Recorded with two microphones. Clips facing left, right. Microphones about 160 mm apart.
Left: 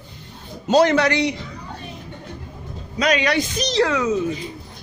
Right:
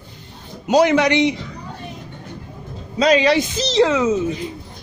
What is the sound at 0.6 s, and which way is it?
Speech, 10° right (ahead or behind).